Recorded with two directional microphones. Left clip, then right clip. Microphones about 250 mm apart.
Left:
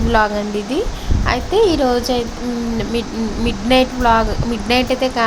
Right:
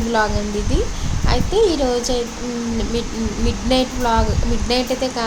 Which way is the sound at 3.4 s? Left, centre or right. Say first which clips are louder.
Left 5 dB; centre.